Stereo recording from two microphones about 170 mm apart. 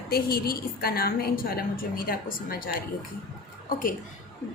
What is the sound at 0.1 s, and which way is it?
A woman's voice, 60° left (ahead or behind).